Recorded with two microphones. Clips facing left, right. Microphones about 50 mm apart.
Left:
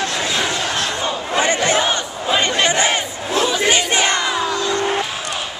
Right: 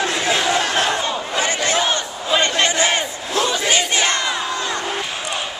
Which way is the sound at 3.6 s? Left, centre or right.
Left.